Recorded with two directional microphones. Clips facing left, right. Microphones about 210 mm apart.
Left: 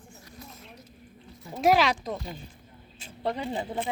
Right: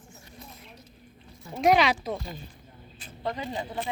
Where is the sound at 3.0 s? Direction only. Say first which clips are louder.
Left 2 dB; 30° left (ahead or behind).